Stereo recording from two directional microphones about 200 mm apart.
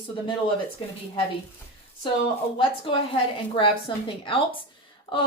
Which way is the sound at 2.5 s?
25° left (ahead or behind).